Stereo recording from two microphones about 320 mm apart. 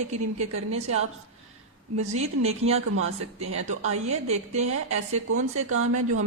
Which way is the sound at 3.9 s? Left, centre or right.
Centre.